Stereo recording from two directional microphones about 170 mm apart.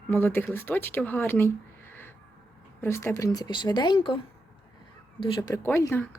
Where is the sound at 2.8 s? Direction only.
15° left (ahead or behind).